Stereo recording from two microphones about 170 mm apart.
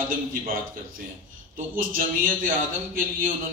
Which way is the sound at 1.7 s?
55° right (ahead or behind).